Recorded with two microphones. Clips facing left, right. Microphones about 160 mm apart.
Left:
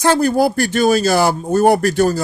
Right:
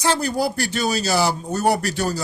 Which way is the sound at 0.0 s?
55° left (ahead or behind).